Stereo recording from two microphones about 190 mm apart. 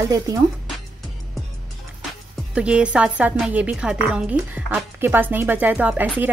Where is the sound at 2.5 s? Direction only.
5° right (ahead or behind).